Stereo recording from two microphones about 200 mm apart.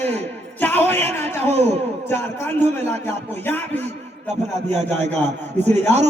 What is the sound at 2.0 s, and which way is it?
A man's voice, 10° left (ahead or behind).